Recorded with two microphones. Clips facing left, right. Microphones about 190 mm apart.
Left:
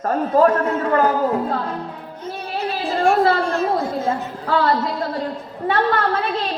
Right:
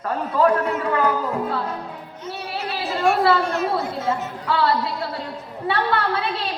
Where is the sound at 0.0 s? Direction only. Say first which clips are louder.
Left 4 dB; 45° left (ahead or behind).